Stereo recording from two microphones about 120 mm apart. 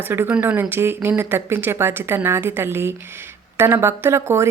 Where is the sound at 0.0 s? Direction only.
20° right (ahead or behind).